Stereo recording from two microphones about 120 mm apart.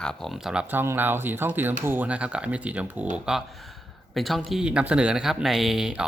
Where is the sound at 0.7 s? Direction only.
15° right (ahead or behind).